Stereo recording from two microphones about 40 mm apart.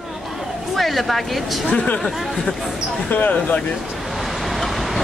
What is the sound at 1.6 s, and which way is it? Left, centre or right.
Speech, left.